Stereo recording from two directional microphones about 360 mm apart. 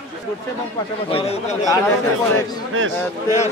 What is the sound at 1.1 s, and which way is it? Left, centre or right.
Speech, centre.